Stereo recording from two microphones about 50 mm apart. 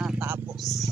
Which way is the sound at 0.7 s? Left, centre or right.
Centre.